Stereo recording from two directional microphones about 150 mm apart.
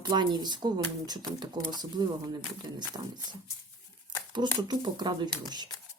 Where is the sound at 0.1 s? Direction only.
30° right (ahead or behind).